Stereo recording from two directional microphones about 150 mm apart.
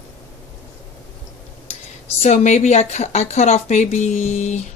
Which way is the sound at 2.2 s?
50° left (ahead or behind).